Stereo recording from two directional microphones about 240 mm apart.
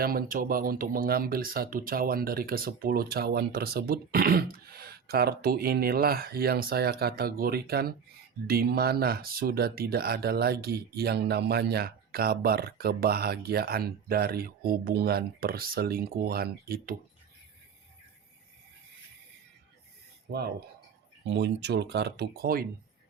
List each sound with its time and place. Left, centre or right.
0.0 s speech: right
20.3 s speech: right